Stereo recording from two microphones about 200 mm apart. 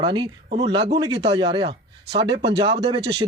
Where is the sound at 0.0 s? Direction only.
25° right (ahead or behind).